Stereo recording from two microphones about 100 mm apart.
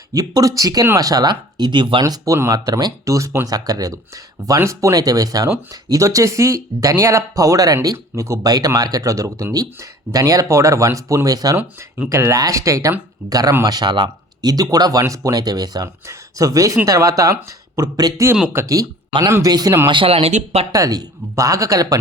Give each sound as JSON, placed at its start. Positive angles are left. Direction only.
{"t": 0.1, "sound": "speech", "side_deg": -40}
{"t": 2.0, "sound": "speech", "side_deg": -35}
{"t": 13.7, "sound": "speech", "side_deg": -45}
{"t": 19.9, "sound": "speech", "side_deg": -60}
{"t": 20.7, "sound": "speech", "side_deg": -35}